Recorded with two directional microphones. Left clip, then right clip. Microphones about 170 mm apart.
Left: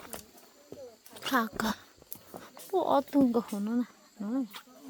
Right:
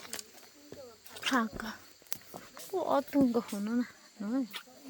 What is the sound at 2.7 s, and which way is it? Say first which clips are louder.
Speech: left 3 dB; 30° left (ahead or behind).